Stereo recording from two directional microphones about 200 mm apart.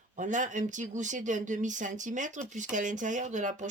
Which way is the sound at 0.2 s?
40° right (ahead or behind).